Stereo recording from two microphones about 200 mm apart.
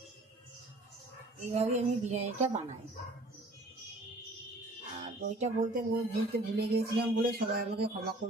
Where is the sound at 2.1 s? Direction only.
35° right (ahead or behind).